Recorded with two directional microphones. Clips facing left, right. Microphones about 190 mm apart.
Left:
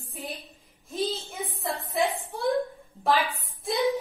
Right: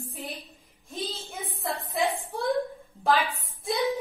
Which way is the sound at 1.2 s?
Centre (ahead or behind).